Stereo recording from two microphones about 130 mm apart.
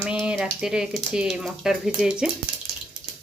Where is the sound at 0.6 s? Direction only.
5° right (ahead or behind).